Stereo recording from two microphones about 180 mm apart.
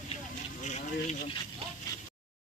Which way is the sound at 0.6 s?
40° left (ahead or behind).